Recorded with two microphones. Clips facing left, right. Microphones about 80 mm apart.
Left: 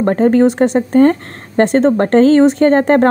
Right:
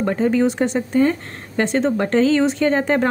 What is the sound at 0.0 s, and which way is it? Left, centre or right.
Speech, left.